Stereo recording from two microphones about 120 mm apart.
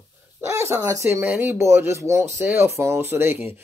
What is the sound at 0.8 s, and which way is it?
Speech, 25° right (ahead or behind).